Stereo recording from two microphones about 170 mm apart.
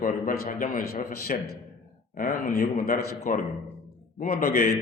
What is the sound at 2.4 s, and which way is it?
Speech, 60° left (ahead or behind).